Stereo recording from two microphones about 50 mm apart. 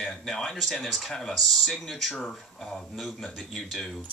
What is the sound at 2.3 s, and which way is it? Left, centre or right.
Speech, centre.